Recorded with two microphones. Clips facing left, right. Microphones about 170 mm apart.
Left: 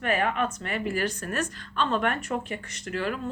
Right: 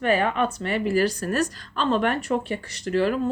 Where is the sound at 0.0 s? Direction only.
30° right (ahead or behind).